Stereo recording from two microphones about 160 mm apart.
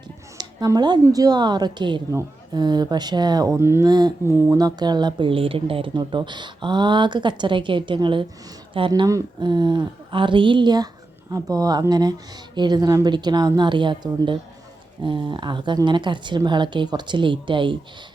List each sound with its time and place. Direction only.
0.3 s speech: 25° right (ahead or behind)